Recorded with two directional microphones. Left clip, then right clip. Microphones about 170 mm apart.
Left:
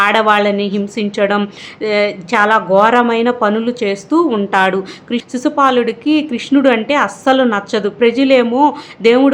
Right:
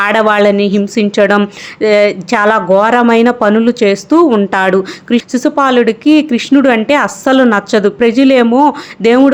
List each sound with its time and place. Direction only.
0.0 s speech: 30° right (ahead or behind)